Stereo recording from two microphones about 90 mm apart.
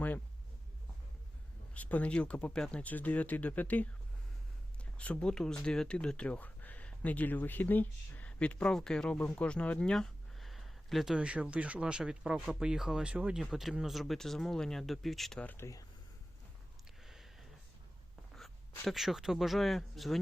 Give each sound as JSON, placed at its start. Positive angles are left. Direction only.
{"t": 1.7, "sound": "speech", "side_deg": 15}
{"t": 4.9, "sound": "speech", "side_deg": 10}
{"t": 15.4, "sound": "speech", "side_deg": 20}
{"t": 17.0, "sound": "a sound", "side_deg": -5}
{"t": 18.3, "sound": "speech", "side_deg": 0}